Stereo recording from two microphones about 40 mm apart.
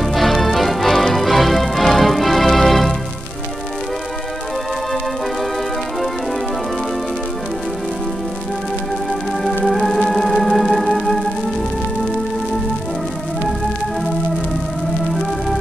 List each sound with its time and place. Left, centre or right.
0.0 s music: centre
9.8 s music: centre